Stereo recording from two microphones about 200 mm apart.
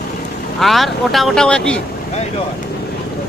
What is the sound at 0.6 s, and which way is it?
Speech, centre (ahead or behind).